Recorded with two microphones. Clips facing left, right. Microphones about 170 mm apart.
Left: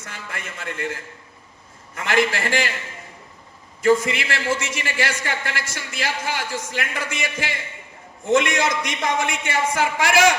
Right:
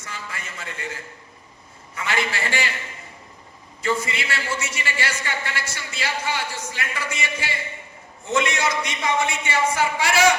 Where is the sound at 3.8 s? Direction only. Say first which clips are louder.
Left 7 dB; 50° left (ahead or behind).